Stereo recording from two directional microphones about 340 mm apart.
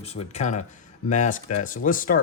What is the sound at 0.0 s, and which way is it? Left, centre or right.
Speech, centre.